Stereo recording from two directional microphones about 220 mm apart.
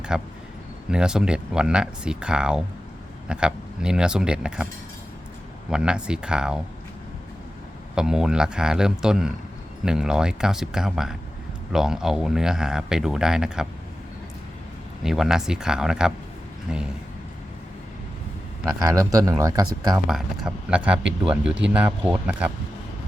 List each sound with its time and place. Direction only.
0.1 s speech: 5° right (ahead or behind)
5.7 s speech: 5° right (ahead or behind)
7.9 s speech: 5° right (ahead or behind)
15.0 s speech: centre (ahead or behind)
18.9 s speech: 15° right (ahead or behind)
20.1 s speech: centre (ahead or behind)